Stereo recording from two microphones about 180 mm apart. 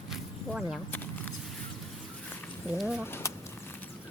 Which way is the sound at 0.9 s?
10° left (ahead or behind).